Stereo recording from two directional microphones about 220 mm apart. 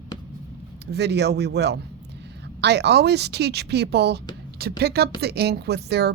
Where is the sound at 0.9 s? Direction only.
50° right (ahead or behind).